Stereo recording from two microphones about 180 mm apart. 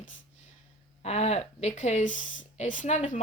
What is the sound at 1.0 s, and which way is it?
A woman's voice, 35° left (ahead or behind).